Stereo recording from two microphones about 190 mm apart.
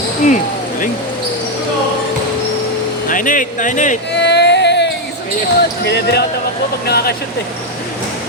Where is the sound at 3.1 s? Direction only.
45° left (ahead or behind).